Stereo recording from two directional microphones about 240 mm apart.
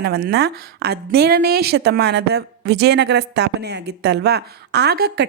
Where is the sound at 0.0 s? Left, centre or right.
Right.